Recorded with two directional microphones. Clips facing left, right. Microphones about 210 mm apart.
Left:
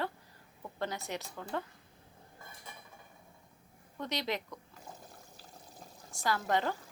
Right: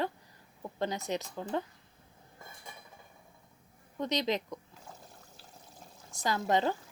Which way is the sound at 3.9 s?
20° right (ahead or behind).